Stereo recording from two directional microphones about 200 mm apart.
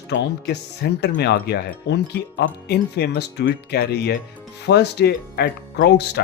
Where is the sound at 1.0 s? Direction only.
55° left (ahead or behind).